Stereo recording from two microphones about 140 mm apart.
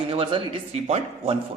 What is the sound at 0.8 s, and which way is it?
Speech, 50° right (ahead or behind).